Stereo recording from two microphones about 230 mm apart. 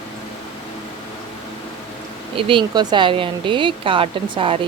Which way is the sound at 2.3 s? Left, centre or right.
Right.